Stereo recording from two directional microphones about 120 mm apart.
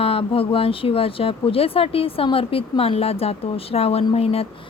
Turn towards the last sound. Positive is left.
turn(degrees=55)  # may be behind; listen again after turning